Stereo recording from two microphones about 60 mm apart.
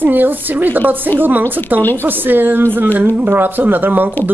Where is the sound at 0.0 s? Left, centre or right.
Right.